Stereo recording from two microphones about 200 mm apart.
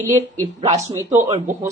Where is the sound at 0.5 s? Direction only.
30° right (ahead or behind).